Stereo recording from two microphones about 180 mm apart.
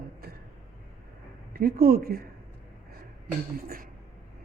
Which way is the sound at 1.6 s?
55° right (ahead or behind).